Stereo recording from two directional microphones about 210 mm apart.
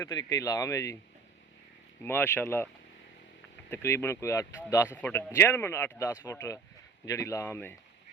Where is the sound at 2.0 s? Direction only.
10° left (ahead or behind).